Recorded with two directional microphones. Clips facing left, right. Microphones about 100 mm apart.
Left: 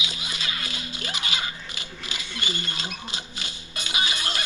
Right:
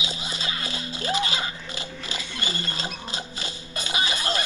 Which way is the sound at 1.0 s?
35° right (ahead or behind).